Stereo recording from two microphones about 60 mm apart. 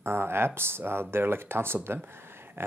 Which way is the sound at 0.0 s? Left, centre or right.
Right.